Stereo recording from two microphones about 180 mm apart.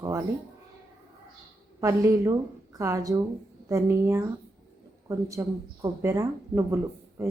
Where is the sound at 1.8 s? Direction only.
15° right (ahead or behind).